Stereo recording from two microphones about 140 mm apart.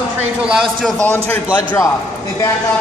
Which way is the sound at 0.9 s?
10° left (ahead or behind).